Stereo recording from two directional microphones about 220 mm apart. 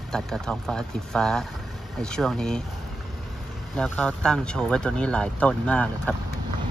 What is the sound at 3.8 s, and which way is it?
A man's voice, 5° left (ahead or behind).